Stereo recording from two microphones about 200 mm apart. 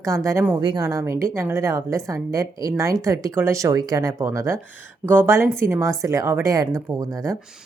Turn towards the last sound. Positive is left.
turn(degrees=-15)  # may be behind; listen again after turning